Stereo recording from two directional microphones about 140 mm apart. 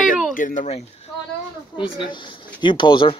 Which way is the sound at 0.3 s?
75° left (ahead or behind).